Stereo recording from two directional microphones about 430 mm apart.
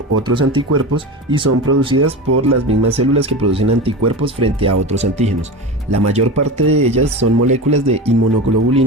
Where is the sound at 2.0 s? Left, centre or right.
Right.